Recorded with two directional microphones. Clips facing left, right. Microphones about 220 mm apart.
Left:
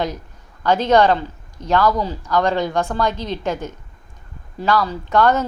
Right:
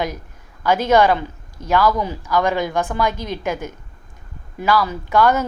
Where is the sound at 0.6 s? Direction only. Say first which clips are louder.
Even; 10° right (ahead or behind).